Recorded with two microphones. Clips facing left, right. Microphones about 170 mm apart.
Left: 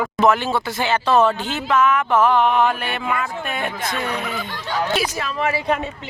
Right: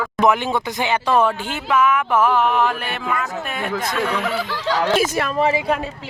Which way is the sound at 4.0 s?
85° right.